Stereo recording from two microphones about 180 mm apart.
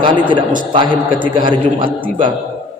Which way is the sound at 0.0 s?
25° right (ahead or behind).